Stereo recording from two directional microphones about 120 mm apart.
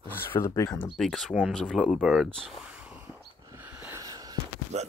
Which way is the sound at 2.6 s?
10° right (ahead or behind).